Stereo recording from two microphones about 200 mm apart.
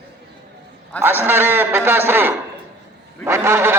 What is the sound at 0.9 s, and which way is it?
A man's voice, 10° right (ahead or behind).